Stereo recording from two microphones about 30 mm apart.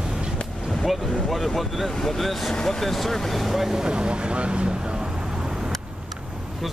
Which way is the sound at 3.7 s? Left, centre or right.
Right.